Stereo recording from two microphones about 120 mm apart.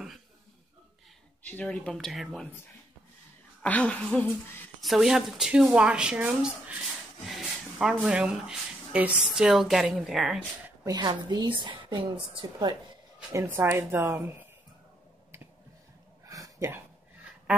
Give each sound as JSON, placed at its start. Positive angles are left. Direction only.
{"t": 1.4, "sound": "speech", "side_deg": 10}
{"t": 3.6, "sound": "speech", "side_deg": 10}
{"t": 4.8, "sound": "speech", "side_deg": -5}
{"t": 10.9, "sound": "a woman's voice", "side_deg": -35}
{"t": 13.3, "sound": "a woman's voice", "side_deg": -20}
{"t": 16.3, "sound": "a sound", "side_deg": -30}